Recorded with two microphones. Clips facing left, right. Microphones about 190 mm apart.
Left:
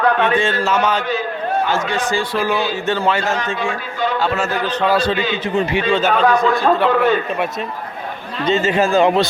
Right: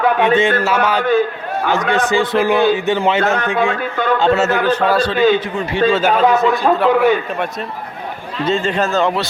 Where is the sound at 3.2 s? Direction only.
60° right (ahead or behind).